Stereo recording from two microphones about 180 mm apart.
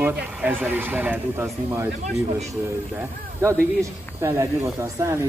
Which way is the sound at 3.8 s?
15° right (ahead or behind).